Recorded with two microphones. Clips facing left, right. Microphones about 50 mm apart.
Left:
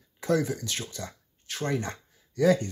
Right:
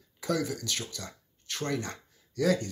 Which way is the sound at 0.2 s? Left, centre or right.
Left.